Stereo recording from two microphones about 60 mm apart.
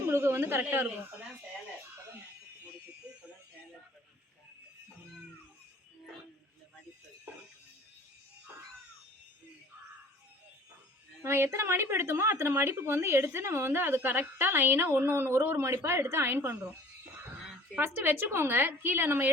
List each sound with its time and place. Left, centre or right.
0.0 s a sound: right
0.6 s a woman's voice: right
11.2 s a woman's voice: right
17.7 s a woman's voice: right